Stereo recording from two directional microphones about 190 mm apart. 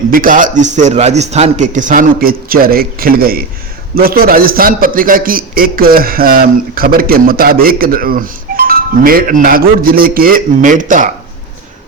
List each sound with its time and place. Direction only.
0.1 s a man's voice: 45° right (ahead or behind)